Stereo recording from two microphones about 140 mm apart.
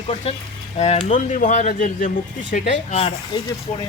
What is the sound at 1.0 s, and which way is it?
Speech, 65° left (ahead or behind).